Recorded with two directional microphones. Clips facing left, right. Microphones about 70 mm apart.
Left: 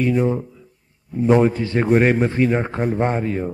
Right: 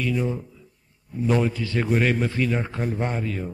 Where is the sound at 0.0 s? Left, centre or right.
Left.